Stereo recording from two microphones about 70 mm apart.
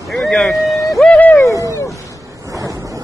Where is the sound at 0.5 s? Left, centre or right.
Left.